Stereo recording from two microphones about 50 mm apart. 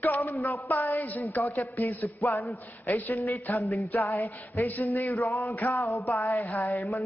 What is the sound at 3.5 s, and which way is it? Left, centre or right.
Speech, left.